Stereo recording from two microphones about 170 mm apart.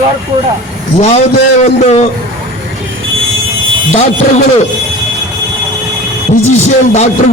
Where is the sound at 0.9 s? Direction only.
45° left (ahead or behind).